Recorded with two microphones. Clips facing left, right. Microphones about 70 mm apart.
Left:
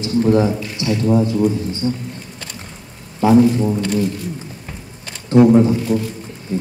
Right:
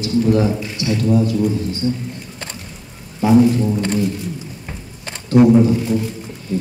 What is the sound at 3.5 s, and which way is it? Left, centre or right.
Speech, left.